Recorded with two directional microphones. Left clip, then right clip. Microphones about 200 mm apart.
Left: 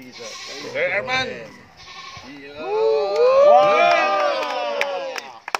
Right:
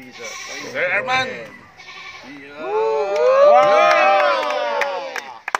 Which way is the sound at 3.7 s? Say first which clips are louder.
Right 3 dB; centre (ahead or behind).